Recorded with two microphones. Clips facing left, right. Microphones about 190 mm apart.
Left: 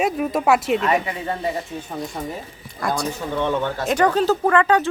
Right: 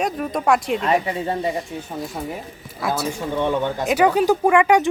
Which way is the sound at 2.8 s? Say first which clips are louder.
Right 1 dB; 5° right (ahead or behind).